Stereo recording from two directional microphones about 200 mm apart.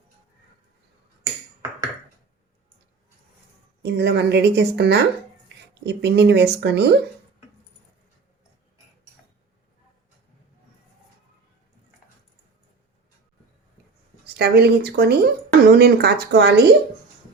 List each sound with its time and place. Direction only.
3.8 s a woman's voice: 55° right (ahead or behind)
14.3 s a woman's voice: 55° right (ahead or behind)